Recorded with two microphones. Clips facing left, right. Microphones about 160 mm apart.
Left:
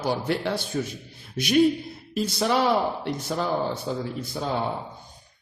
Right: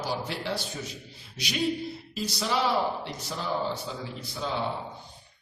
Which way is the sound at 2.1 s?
55° left (ahead or behind).